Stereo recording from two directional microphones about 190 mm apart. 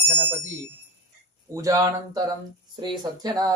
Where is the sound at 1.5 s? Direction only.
15° right (ahead or behind).